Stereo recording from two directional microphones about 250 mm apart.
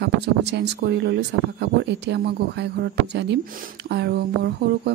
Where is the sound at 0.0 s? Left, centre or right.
Right.